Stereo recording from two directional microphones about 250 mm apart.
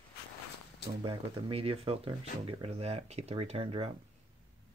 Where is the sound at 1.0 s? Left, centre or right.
Right.